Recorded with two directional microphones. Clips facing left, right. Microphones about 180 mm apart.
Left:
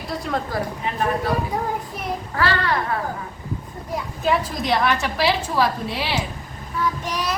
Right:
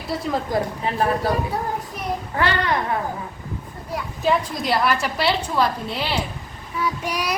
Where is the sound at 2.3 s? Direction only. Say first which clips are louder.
Even; 20° right (ahead or behind).